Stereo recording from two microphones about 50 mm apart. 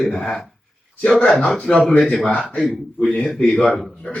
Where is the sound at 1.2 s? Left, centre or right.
Left.